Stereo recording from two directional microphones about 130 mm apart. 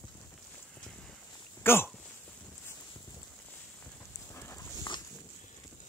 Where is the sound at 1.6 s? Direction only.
20° left (ahead or behind).